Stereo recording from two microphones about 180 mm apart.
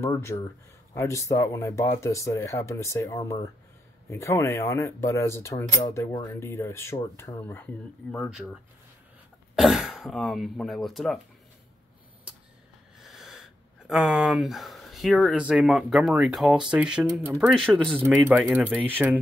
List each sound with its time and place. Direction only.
0.0 s speech: 15° left (ahead or behind)
8.1 s speech: centre (ahead or behind)
9.6 s speech: centre (ahead or behind)
13.0 s speech: centre (ahead or behind)
17.5 s speech: centre (ahead or behind)